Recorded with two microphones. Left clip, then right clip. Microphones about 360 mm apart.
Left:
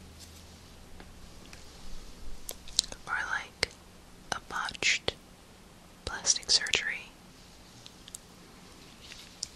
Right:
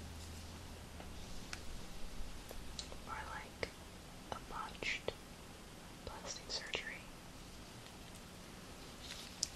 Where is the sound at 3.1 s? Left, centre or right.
Centre.